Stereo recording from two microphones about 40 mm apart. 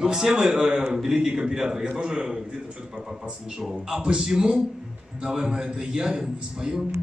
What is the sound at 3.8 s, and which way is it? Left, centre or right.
A man's voice, centre.